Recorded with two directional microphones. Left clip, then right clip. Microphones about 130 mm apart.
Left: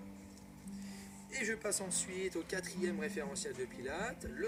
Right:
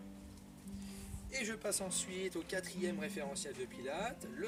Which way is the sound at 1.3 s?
10° right (ahead or behind).